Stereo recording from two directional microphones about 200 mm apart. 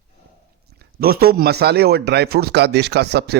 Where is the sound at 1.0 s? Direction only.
50° right (ahead or behind).